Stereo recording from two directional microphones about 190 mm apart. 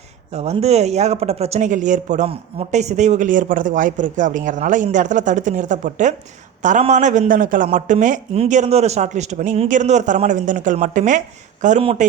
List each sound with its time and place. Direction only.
0.3 s speech: 35° right (ahead or behind)